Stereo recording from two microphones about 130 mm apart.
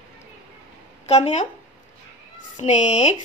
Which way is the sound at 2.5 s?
65° left (ahead or behind).